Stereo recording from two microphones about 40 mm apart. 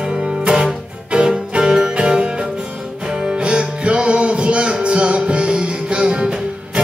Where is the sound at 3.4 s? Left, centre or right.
Right.